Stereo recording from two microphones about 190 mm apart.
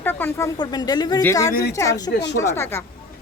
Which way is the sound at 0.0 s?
10° left (ahead or behind).